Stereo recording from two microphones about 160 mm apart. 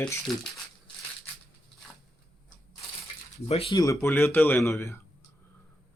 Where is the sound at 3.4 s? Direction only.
35° left (ahead or behind).